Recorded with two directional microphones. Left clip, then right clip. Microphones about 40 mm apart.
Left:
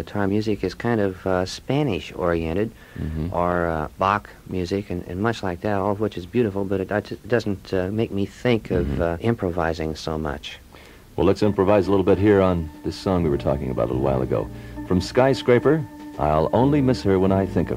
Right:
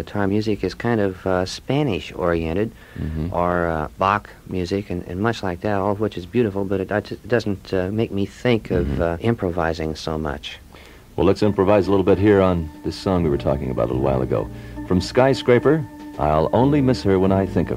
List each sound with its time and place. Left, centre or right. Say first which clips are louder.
0.0 s speech: right 2 dB; right